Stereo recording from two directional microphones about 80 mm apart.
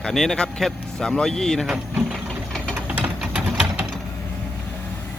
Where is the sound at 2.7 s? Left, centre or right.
Centre.